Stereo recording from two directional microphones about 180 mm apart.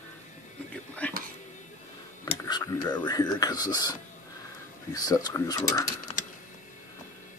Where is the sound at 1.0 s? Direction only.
10° left (ahead or behind).